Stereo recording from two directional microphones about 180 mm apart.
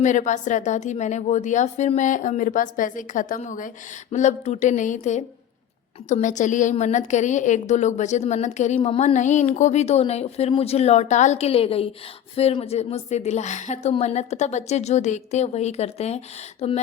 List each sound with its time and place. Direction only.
0.0 s a woman's voice: 45° left (ahead or behind)